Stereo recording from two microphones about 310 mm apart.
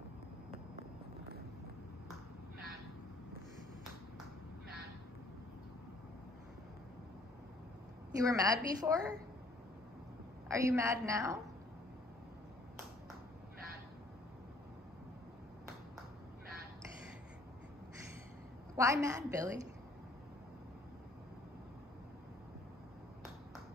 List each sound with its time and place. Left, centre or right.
8.2 s a woman's voice: centre
10.5 s a woman's voice: centre
18.8 s a woman's voice: centre